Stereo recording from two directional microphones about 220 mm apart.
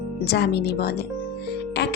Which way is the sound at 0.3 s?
50° left (ahead or behind).